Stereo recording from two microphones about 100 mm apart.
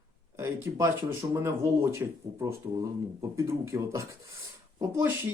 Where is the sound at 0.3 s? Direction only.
25° right (ahead or behind).